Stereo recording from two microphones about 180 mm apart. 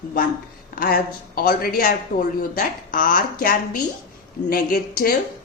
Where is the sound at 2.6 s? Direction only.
50° left (ahead or behind).